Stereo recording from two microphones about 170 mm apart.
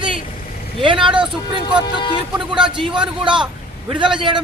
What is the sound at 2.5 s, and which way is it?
Speech, 5° right (ahead or behind).